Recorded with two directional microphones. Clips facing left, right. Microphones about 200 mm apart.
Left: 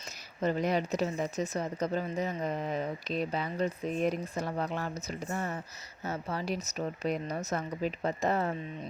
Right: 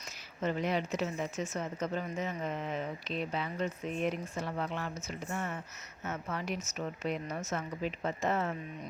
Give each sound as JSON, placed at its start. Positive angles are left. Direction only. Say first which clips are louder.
{"t": 0.4, "sound": "speech", "louder": "left 3 dB", "side_deg": 40}